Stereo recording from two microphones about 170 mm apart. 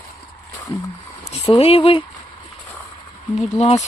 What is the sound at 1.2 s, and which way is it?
Speech, 35° left (ahead or behind).